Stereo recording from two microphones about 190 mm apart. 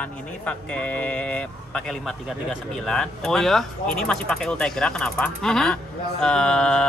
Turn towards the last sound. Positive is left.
turn(degrees=5)  # may be behind; listen again after turning